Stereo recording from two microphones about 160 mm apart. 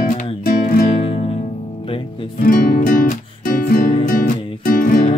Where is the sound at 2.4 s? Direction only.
60° left (ahead or behind).